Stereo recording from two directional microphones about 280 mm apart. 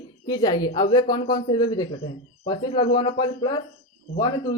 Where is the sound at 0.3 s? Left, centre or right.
Centre.